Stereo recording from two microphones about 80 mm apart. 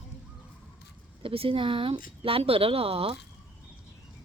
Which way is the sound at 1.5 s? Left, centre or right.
Right.